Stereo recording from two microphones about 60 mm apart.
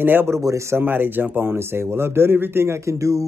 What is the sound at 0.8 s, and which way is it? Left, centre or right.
Speech, right.